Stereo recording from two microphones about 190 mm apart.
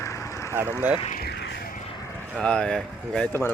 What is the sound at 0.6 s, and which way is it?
Speech, 10° right (ahead or behind).